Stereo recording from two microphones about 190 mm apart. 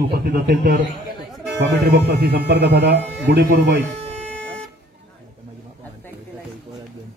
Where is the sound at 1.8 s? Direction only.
55° right (ahead or behind).